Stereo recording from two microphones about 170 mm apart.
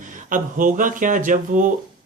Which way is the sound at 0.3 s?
50° right (ahead or behind).